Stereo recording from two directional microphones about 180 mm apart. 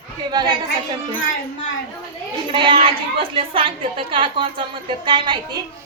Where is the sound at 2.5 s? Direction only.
30° right (ahead or behind).